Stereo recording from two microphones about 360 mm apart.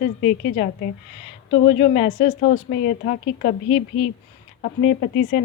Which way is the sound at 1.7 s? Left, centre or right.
Centre.